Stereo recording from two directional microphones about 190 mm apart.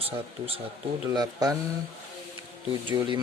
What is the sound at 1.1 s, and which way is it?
Speech, 20° right (ahead or behind).